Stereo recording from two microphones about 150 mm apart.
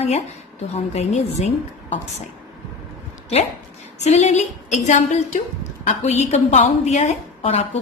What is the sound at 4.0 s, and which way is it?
A woman's voice, 50° left (ahead or behind).